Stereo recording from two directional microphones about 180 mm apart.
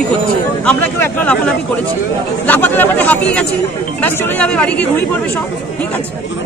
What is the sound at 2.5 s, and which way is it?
A man's voice, 10° left (ahead or behind).